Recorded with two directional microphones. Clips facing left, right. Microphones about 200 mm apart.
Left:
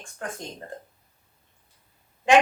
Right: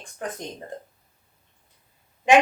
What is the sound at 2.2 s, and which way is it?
Speech, 20° right (ahead or behind).